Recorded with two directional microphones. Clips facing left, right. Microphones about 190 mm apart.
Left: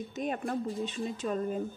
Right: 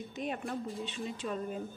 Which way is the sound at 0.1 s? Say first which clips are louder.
Left 4 dB; 40° left (ahead or behind).